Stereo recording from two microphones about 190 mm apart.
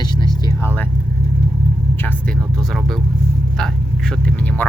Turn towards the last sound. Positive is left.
turn(degrees=10)  # may be behind; listen again after turning